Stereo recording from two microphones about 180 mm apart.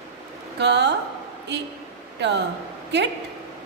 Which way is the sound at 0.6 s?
70° right (ahead or behind).